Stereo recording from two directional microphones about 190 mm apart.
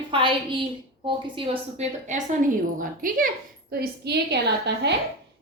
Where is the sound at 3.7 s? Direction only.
60° right (ahead or behind).